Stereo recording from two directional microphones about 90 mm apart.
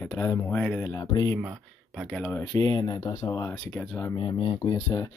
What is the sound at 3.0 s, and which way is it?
Speech, 35° left (ahead or behind).